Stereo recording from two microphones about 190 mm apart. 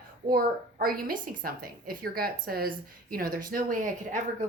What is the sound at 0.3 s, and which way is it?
A woman's voice, 50° right (ahead or behind).